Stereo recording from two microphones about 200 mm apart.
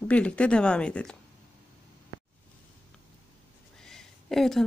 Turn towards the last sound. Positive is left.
turn(degrees=0)  # may be behind; listen again after turning